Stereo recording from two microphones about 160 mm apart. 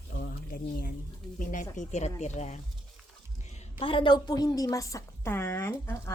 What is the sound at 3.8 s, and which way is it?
A woman's voice, 30° left (ahead or behind).